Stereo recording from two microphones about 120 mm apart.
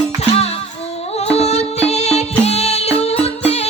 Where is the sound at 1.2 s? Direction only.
60° left (ahead or behind).